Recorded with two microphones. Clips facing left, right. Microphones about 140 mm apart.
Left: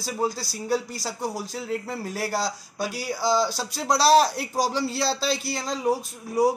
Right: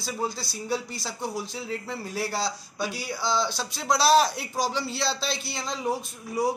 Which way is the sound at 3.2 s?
40° left (ahead or behind).